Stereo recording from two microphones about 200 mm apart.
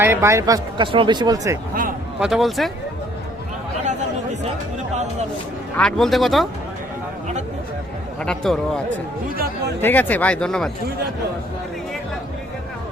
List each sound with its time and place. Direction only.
0.0 s speech: 15° right (ahead or behind)
2.1 s speech: centre (ahead or behind)
5.7 s speech: centre (ahead or behind)
8.2 s speech: 5° left (ahead or behind)
9.8 s speech: 10° left (ahead or behind)